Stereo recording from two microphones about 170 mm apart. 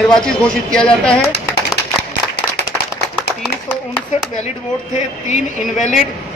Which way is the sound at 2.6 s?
70° left (ahead or behind).